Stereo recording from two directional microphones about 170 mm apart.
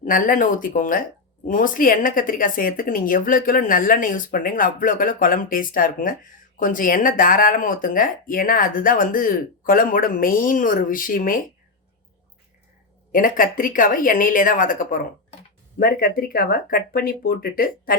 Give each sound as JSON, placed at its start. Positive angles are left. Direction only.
{"t": 0.0, "sound": "speech", "side_deg": 55}
{"t": 13.1, "sound": "speech", "side_deg": 55}